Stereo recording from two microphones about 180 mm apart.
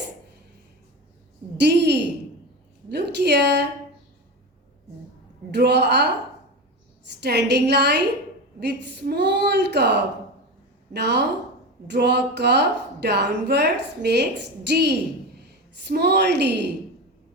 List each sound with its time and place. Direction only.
1.5 s a woman's voice: 70° right (ahead or behind)
5.5 s a woman's voice: 70° right (ahead or behind)
7.2 s a woman's voice: 70° right (ahead or behind)